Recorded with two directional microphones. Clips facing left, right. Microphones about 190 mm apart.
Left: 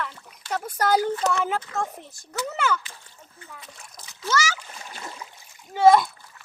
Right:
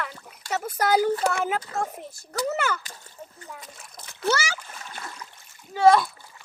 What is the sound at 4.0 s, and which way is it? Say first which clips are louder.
Splash: right 8 dB; 55° right (ahead or behind).